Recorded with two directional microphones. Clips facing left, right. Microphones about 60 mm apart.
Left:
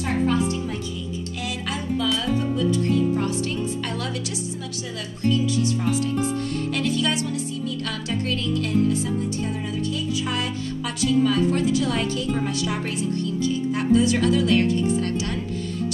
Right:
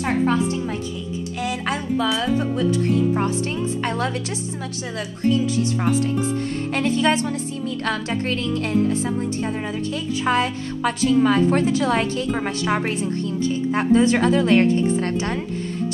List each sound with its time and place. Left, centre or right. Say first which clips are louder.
1.4 s speech: right 6 dB; right
2.0 s speech: right 1 dB; right
5.2 s speech: right 2 dB; right